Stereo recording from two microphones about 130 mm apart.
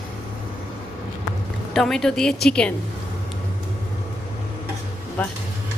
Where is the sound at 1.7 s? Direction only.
5° left (ahead or behind).